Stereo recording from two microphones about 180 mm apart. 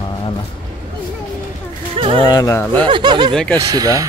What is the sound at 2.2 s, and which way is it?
Speech, 20° left (ahead or behind).